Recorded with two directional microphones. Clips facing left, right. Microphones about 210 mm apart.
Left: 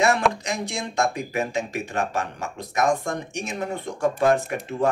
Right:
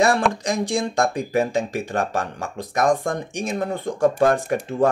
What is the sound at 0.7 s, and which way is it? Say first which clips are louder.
Speech: right 4 dB; 35° right (ahead or behind).